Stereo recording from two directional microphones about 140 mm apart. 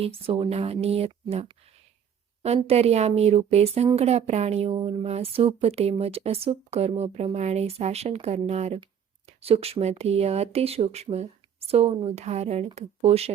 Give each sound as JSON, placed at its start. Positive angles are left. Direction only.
{"t": 0.0, "sound": "a woman's voice", "side_deg": -40}
{"t": 2.6, "sound": "a woman's voice", "side_deg": -50}